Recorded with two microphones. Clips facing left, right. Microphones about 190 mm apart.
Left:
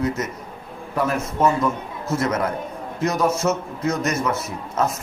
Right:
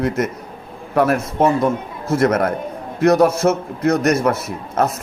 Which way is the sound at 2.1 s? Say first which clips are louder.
Right 6 dB; 55° right (ahead or behind).